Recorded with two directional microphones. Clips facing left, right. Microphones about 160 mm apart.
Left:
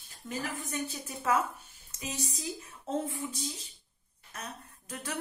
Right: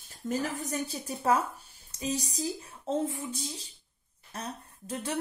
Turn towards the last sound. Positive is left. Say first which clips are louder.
# right 5 dB
turn(degrees=-30)  # may be behind; listen again after turning